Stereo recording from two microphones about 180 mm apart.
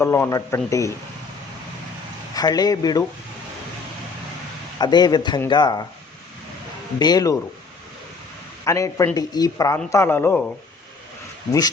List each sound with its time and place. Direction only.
0.0 s a woman's voice: 15° left (ahead or behind)
2.3 s a man's voice: 20° left (ahead or behind)
4.8 s a man's voice: 25° left (ahead or behind)
7.0 s a man's voice: 20° left (ahead or behind)
8.6 s a woman's voice: 15° left (ahead or behind)